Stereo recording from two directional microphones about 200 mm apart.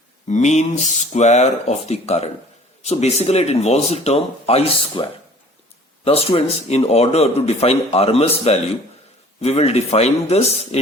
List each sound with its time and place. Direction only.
0.3 s speech: 35° left (ahead or behind)
6.1 s speech: 30° left (ahead or behind)